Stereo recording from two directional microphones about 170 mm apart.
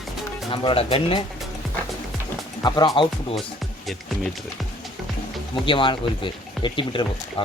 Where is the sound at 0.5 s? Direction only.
30° left (ahead or behind).